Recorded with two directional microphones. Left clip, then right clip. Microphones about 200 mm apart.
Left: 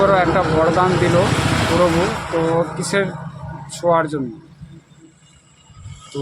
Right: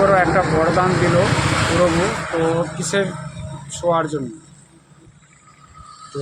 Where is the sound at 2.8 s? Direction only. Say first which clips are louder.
Left 1 dB; 10° left (ahead or behind).